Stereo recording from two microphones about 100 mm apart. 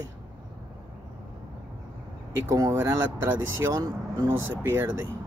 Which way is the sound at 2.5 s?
35° right (ahead or behind).